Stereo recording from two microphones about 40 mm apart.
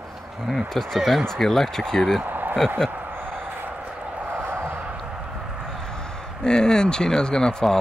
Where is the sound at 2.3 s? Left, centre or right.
Right.